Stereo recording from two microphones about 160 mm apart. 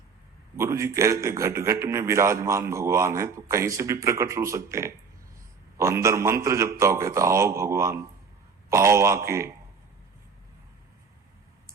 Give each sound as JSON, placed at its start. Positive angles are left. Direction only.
{"t": 0.5, "sound": "a man's voice", "side_deg": -15}